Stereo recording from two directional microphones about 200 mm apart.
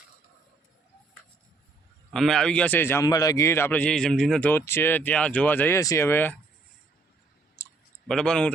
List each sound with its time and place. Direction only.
2.0 s a man's voice: centre (ahead or behind)
7.6 s clicking: 15° left (ahead or behind)
8.0 s a man's voice: 5° left (ahead or behind)